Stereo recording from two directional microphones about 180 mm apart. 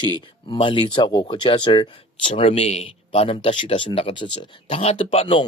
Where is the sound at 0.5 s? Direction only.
25° left (ahead or behind).